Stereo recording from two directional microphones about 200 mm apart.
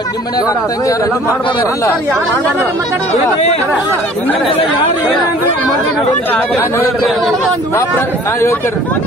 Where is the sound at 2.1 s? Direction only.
15° right (ahead or behind).